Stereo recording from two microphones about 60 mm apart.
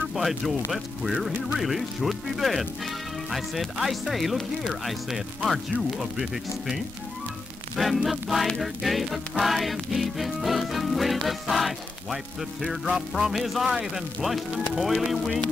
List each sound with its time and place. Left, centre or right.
0.1 s speech: centre
1.2 s music: centre